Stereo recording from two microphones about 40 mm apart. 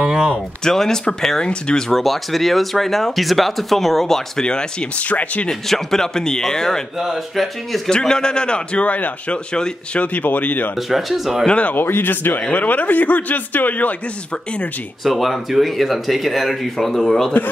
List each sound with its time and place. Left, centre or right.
0.7 s a man's voice: centre
1.9 s speech: centre
4.5 s a man's voice: left
5.0 s speech: left
5.5 s speech: centre
7.0 s speech: centre
7.9 s a man's voice: centre
8.8 s a man's voice: left
10.9 s speech: centre
11.4 s speech: left
11.7 s speech: left
12.4 s a man's voice: left
15.0 s speech: centre